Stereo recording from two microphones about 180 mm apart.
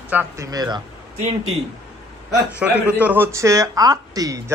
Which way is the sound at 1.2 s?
40° right (ahead or behind).